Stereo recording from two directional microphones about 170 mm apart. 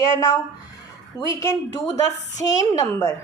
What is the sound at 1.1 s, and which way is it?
A woman's voice, 20° left (ahead or behind).